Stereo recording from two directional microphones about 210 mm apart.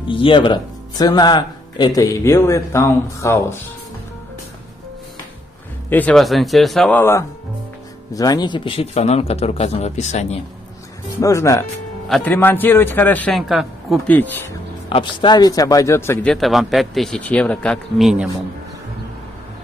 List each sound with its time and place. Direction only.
0.0 s speech: 25° left (ahead or behind)
5.9 s a man's voice: 5° left (ahead or behind); by 10.2 s 35° left (ahead or behind)
11.1 s speech: 15° left (ahead or behind)
14.9 s a man's voice: 25° left (ahead or behind); by 18.3 s centre (ahead or behind)